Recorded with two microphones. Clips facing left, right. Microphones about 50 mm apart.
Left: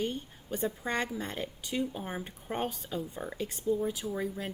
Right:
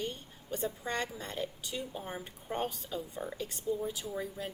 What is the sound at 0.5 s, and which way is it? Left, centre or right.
A woman's voice, left.